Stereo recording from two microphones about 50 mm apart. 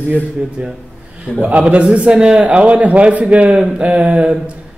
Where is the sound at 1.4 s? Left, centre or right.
Right.